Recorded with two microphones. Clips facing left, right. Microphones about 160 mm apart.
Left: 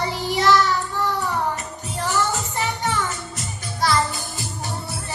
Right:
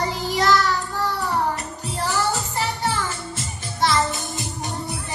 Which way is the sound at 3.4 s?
25° right (ahead or behind).